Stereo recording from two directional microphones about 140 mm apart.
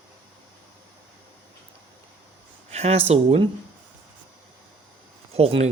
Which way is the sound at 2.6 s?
50° right (ahead or behind).